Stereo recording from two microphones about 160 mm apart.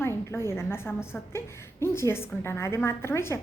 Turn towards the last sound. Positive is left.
turn(degrees=15)  # may be behind; listen again after turning